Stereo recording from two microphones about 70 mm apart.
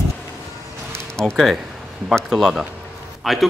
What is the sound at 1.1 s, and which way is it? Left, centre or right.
Speech, centre.